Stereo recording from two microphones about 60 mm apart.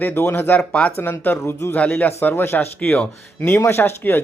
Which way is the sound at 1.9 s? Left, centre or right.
Left.